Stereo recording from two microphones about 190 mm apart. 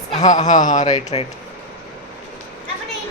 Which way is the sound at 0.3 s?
40° left (ahead or behind).